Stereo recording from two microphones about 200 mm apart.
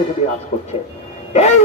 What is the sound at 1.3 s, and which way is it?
Speech, 35° left (ahead or behind).